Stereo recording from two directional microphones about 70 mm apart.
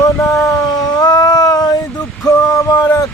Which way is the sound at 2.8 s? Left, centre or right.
Left.